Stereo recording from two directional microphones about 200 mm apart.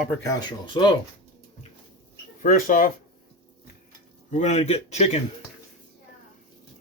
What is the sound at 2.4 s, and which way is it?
Speech, 45° left (ahead or behind).